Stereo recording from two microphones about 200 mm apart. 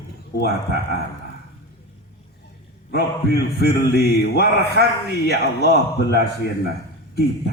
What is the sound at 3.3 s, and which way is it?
A man's voice, 55° left (ahead or behind).